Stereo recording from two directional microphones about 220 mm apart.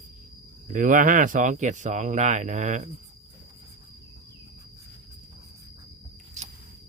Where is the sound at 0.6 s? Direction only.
35° right (ahead or behind).